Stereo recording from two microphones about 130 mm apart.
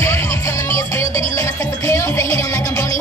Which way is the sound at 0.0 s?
20° left (ahead or behind).